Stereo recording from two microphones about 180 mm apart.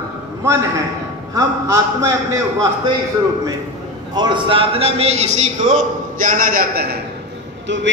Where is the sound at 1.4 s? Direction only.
15° right (ahead or behind).